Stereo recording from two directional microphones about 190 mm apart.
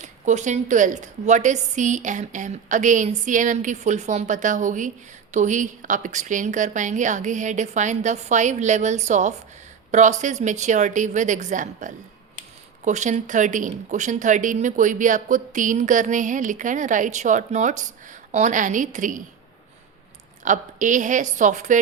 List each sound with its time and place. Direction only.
0.0 s speech: 40° right (ahead or behind)
20.4 s speech: 40° right (ahead or behind)